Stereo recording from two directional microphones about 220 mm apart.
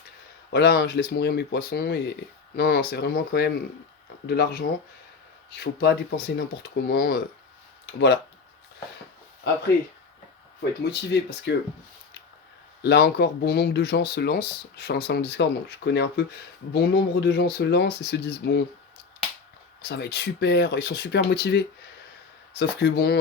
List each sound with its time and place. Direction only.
0.5 s speech: 50° left (ahead or behind)
10.6 s speech: 50° left (ahead or behind)
12.8 s speech: 50° left (ahead or behind)
19.8 s speech: 50° left (ahead or behind)